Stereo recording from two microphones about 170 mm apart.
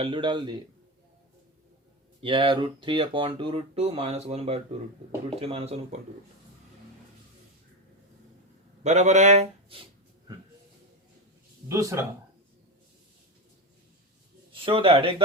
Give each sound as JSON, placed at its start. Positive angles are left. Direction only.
{"t": 0.0, "sound": "a man's voice", "side_deg": -30}
{"t": 2.2, "sound": "speech", "side_deg": -30}
{"t": 8.8, "sound": "speech", "side_deg": -40}
{"t": 11.7, "sound": "speech", "side_deg": -20}
{"t": 14.5, "sound": "speech", "side_deg": -30}